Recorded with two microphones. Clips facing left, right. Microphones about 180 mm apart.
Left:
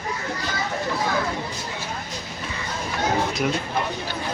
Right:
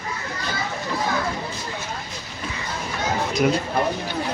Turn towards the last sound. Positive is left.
turn(degrees=0)  # may be behind; listen again after turning